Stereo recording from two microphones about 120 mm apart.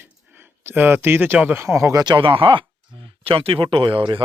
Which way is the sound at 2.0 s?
40° right (ahead or behind).